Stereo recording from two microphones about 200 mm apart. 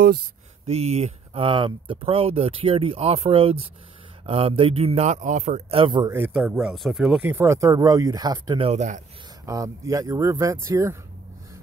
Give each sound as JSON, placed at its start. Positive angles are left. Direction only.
{"t": 0.7, "sound": "speech", "side_deg": -30}
{"t": 6.1, "sound": "speech", "side_deg": -10}
{"t": 7.2, "sound": "speech", "side_deg": -10}
{"t": 8.6, "sound": "speech", "side_deg": -35}
{"t": 9.5, "sound": "speech", "side_deg": -15}